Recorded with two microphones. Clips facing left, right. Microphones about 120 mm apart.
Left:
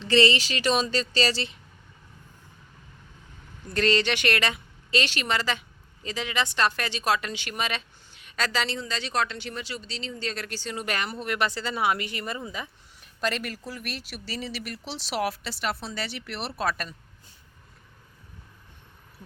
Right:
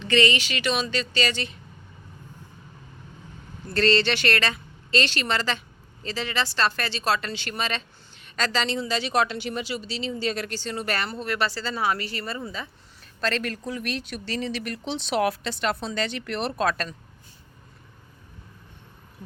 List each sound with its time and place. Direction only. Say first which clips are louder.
0.0 s speech: left 1 dB; 30° left (ahead or behind)
3.8 s a woman's voice: right 2 dB; 10° left (ahead or behind)
8.7 s speech: right 5 dB; 10° right (ahead or behind)
10.5 s speech: right 2 dB; 10° left (ahead or behind)